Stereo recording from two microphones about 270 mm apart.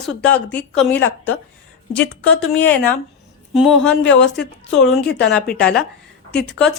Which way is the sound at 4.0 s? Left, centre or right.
Left.